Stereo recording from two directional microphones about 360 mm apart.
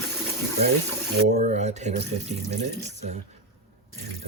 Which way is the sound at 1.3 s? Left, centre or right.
Centre.